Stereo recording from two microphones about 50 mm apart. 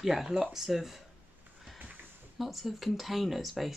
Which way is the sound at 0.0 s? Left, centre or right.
Centre.